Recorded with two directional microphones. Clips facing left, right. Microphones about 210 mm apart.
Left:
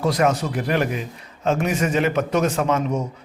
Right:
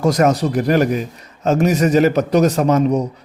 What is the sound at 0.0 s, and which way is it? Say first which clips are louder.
A man's voice: right 5 dB; 45° right (ahead or behind).